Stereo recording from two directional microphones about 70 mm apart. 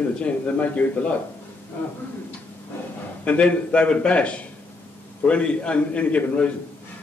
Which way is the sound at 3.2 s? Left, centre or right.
Centre.